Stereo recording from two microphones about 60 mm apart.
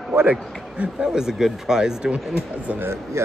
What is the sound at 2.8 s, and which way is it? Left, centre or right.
Speech, right.